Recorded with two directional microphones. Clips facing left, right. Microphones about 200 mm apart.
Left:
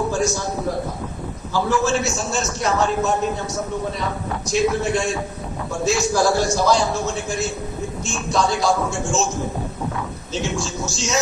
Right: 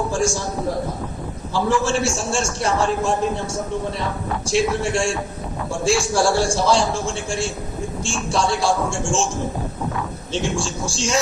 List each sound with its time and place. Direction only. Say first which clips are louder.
0.1 s a sound: even; 30° right (ahead or behind)
1.8 s a man's voice: even; 30° right (ahead or behind)
4.4 s a man's voice: left 1 dB; 30° right (ahead or behind)
10.3 s speech: right 1 dB; 30° right (ahead or behind)